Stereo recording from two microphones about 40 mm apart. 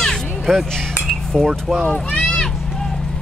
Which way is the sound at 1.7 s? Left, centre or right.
Left.